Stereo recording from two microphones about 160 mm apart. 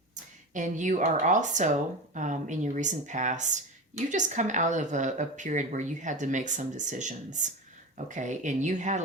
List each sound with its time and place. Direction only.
0.5 s speech: 50° right (ahead or behind)